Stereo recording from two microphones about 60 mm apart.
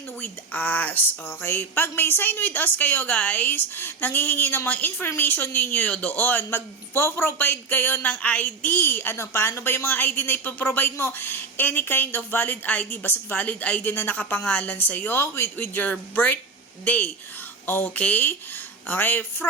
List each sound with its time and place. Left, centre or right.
0.2 s speech: left
8.2 s speech: left
9.1 s speech: left
14.2 s speech: left
17.9 s speech: left